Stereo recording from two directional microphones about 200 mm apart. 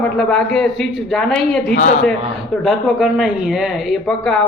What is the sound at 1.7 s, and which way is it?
Speech, 40° left (ahead or behind).